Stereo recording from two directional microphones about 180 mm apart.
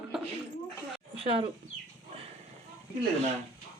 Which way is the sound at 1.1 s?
30° right (ahead or behind).